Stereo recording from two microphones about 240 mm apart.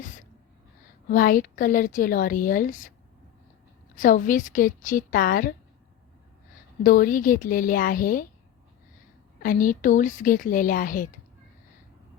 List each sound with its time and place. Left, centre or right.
1.0 s a woman's voice: left
3.9 s a woman's voice: left
6.8 s a woman's voice: left
9.4 s a woman's voice: left